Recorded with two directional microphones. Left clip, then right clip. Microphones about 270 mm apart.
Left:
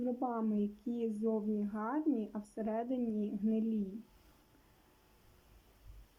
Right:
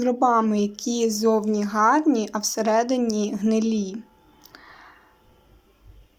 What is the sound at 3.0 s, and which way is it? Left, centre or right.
Speech, right.